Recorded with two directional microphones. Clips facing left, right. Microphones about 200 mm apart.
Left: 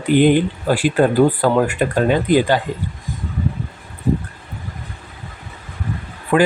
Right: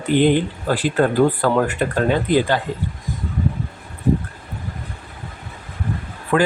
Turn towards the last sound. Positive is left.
turn(degrees=15)  # may be behind; listen again after turning